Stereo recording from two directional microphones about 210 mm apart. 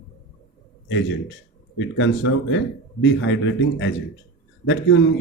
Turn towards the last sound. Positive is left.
turn(degrees=60)  # may be behind; listen again after turning